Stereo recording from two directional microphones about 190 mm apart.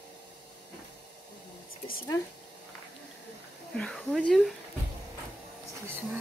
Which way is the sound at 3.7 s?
5° left (ahead or behind).